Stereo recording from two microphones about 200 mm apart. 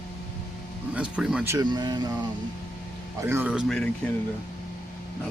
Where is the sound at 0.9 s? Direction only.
5° right (ahead or behind).